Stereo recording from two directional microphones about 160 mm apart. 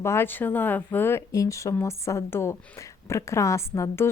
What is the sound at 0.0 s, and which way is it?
A woman's voice, 15° left (ahead or behind).